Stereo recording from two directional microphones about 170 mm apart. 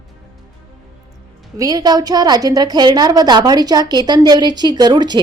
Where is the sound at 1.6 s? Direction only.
20° right (ahead or behind).